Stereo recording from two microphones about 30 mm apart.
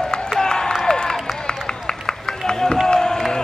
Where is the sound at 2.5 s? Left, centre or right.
Left.